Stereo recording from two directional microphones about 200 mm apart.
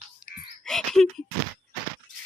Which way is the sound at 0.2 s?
5° right (ahead or behind).